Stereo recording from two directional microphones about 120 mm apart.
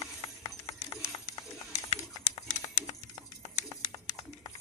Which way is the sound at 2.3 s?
30° left (ahead or behind).